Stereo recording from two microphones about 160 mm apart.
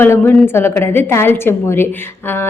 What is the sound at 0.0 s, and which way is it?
A woman's voice, 15° left (ahead or behind).